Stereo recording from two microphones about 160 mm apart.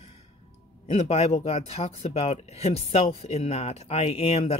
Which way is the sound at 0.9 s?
40° left (ahead or behind).